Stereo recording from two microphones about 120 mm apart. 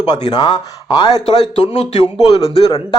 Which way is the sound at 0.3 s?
35° left (ahead or behind).